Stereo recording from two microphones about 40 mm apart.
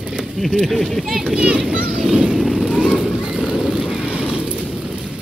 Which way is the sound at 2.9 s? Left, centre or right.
Right.